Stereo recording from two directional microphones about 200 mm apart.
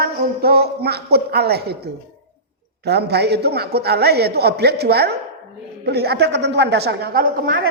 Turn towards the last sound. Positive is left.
turn(degrees=-45)  # may be behind; listen again after turning